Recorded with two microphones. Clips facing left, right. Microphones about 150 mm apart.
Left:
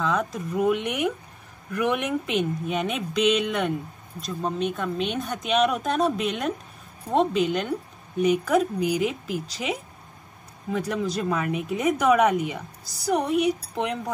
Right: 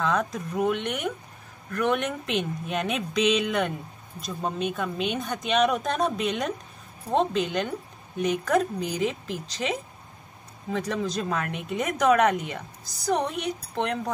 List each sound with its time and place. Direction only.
0.0 s speech: centre (ahead or behind)